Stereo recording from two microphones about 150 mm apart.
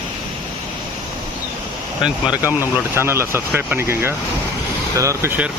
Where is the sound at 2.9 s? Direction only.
15° right (ahead or behind).